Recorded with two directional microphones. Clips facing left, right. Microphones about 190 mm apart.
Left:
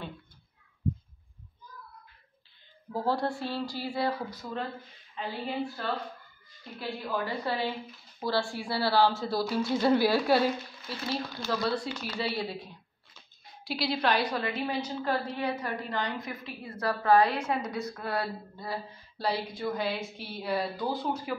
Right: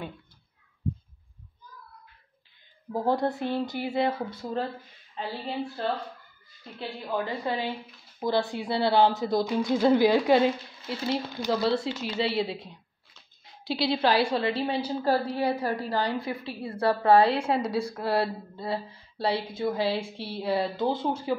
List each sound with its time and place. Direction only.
2.9 s a woman's voice: 15° right (ahead or behind)
13.8 s a woman's voice: 25° right (ahead or behind)